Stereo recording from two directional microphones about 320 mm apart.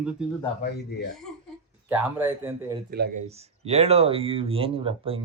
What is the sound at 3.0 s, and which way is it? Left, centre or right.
Speech, right.